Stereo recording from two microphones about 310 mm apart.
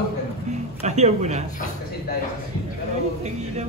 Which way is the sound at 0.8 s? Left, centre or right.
Right.